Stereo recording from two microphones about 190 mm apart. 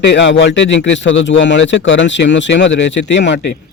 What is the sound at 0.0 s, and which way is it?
Speech, 70° left (ahead or behind).